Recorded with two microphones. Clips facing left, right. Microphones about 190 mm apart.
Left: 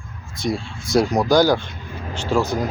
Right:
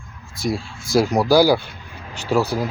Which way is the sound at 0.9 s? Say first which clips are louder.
Right 1 dB; 5° right (ahead or behind).